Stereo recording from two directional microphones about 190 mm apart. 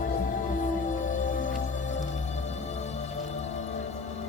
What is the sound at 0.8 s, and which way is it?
Music, 45° left (ahead or behind).